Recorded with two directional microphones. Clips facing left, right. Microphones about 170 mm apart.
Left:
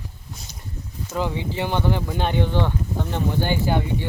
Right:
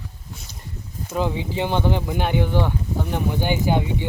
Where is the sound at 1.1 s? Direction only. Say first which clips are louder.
Right 2 dB; 15° right (ahead or behind).